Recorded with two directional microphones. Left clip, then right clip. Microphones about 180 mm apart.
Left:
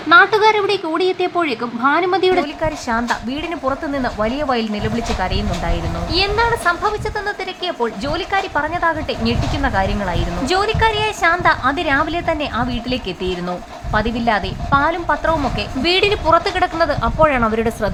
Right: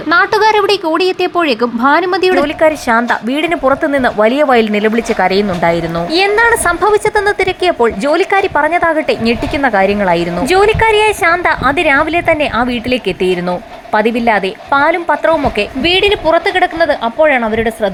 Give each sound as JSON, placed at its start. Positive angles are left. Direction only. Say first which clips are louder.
{"t": 0.1, "sound": "a woman's voice", "louder": "right 1 dB", "side_deg": -35}